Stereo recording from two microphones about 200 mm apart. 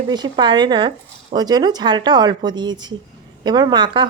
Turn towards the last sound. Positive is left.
turn(degrees=-25)  # may be behind; listen again after turning